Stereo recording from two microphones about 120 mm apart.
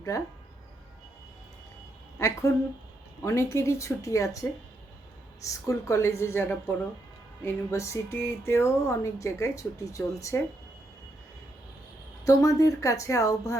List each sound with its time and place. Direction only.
0.1 s speech: 25° left (ahead or behind)
2.1 s a woman's voice: 25° left (ahead or behind)
12.2 s speech: 30° left (ahead or behind)